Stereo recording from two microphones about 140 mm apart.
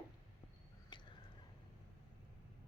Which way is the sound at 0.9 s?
35° left (ahead or behind).